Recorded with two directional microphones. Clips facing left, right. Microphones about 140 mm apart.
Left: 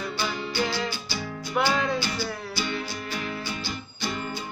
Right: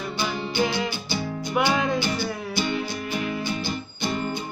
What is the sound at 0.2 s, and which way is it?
Music, 15° right (ahead or behind).